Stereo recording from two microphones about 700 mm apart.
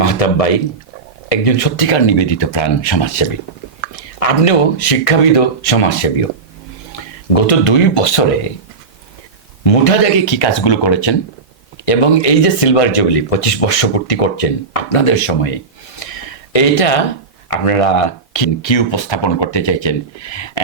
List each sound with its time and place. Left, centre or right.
0.0 s speech: left
4.2 s speech: left
7.3 s speech: left
9.6 s speech: left
11.9 s speech: left
16.0 s a sound: left
16.5 s speech: left